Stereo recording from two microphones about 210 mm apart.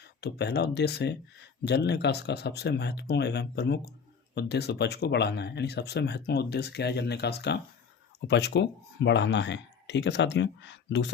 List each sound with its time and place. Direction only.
0.2 s speech: 50° left (ahead or behind)